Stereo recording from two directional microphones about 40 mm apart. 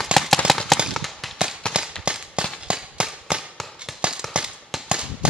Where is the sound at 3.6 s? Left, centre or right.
Centre.